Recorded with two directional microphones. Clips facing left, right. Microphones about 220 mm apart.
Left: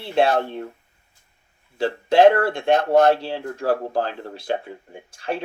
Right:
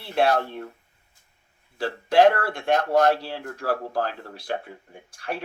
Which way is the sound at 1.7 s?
25° left (ahead or behind).